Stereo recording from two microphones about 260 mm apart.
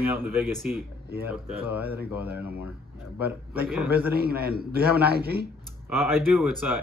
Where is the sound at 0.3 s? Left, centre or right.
Centre.